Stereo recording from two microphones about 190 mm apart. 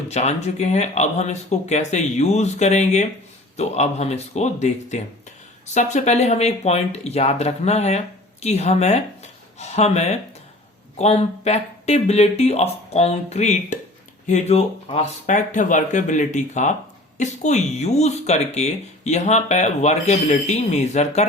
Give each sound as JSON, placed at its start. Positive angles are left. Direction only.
{"t": 0.1, "sound": "speech", "side_deg": 35}